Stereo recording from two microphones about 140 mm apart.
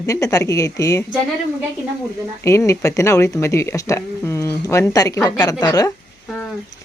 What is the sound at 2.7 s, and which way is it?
Speech, 20° left (ahead or behind).